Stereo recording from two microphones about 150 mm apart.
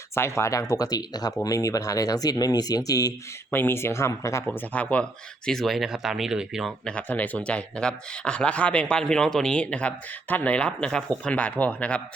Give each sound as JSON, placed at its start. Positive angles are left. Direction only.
{"t": 0.1, "sound": "speech", "side_deg": 15}
{"t": 6.9, "sound": "speech", "side_deg": 10}